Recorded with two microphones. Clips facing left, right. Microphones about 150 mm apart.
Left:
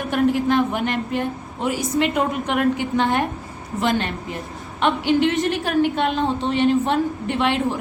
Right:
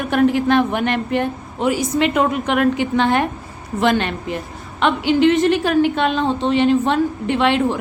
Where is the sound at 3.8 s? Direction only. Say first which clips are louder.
Right 4 dB; 75° right (ahead or behind).